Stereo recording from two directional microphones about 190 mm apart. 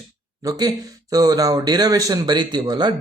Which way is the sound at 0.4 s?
20° right (ahead or behind).